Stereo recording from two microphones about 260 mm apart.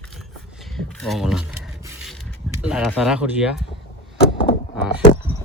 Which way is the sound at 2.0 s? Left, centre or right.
Centre.